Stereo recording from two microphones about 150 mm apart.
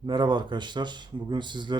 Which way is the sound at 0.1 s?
30° right (ahead or behind).